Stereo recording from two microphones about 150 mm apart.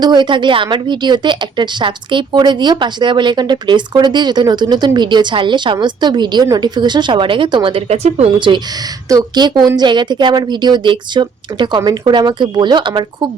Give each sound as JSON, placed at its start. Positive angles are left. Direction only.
{"t": 0.0, "sound": "a woman's voice", "side_deg": -30}